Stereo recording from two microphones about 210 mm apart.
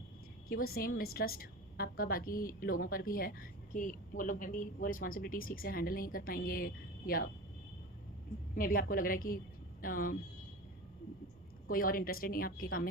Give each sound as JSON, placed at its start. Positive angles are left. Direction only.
{"t": 0.4, "sound": "a woman's voice", "side_deg": 45}
{"t": 8.5, "sound": "a woman's voice", "side_deg": 40}
{"t": 11.7, "sound": "a woman's voice", "side_deg": 45}